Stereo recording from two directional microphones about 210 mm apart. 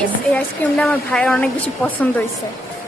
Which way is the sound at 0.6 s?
5° left (ahead or behind).